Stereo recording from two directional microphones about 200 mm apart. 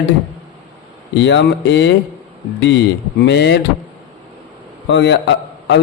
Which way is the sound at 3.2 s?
60° left (ahead or behind).